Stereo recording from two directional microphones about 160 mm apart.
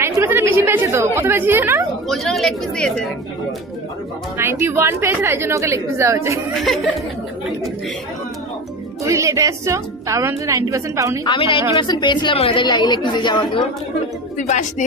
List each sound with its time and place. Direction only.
0.0 s a woman's voice: 15° right (ahead or behind)
2.0 s speech: centre (ahead or behind)
4.4 s a woman's voice: 15° right (ahead or behind)
6.5 s speech: centre (ahead or behind)
9.0 s a woman's voice: 20° right (ahead or behind)
11.2 s a woman's voice: 30° left (ahead or behind)
14.4 s speech: 50° left (ahead or behind)